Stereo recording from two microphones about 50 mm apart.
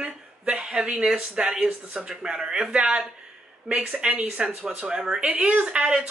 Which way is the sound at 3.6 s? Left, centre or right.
Centre.